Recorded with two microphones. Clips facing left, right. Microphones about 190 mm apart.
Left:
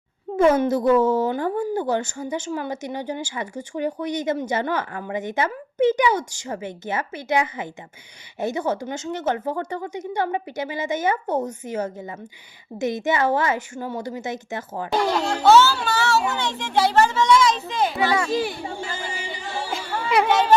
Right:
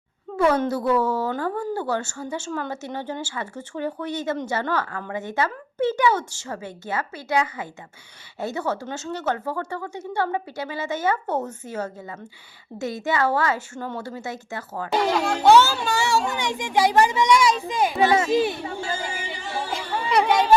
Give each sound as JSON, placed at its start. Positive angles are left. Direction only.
{"t": 0.3, "sound": "a woman's voice", "side_deg": 20}
{"t": 14.9, "sound": "speech", "side_deg": -5}
{"t": 15.4, "sound": "a child's voice", "side_deg": -15}